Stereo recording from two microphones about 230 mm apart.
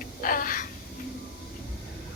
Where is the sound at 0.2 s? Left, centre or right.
Left.